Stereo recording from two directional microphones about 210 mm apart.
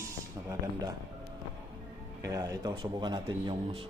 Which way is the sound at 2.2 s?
15° right (ahead or behind).